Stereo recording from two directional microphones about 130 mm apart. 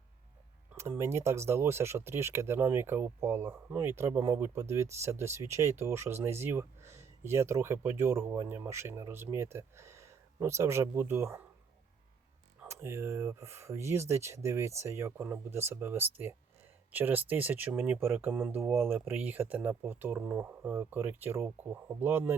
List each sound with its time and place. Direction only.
0.8 s speech: 20° right (ahead or behind)
12.5 s speech: 20° right (ahead or behind)